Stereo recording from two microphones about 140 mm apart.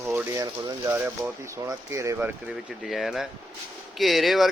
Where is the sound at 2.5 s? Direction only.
Centre (ahead or behind).